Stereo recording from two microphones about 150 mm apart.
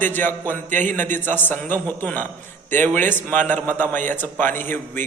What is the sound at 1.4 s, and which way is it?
A man's voice, 15° left (ahead or behind).